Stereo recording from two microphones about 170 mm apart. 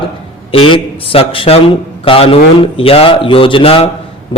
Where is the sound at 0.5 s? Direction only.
35° left (ahead or behind).